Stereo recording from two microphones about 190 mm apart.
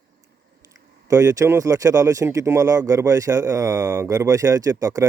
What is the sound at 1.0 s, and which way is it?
Speech, 20° right (ahead or behind).